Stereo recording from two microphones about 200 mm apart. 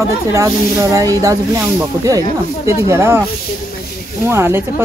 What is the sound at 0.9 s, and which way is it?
Speech, 15° right (ahead or behind).